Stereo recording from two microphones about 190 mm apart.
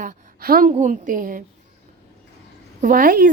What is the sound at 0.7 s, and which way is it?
Speech, 40° right (ahead or behind).